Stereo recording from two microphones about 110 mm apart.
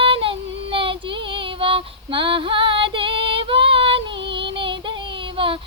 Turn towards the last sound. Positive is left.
turn(degrees=-55)  # may be behind; listen again after turning